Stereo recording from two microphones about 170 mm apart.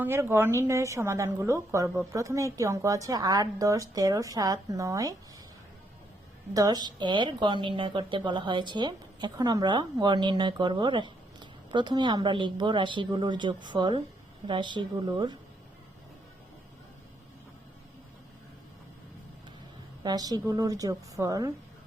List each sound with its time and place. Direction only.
0.0 s a woman's voice: 15° right (ahead or behind)
6.5 s speech: 20° right (ahead or behind)
20.0 s a woman's voice: 25° right (ahead or behind)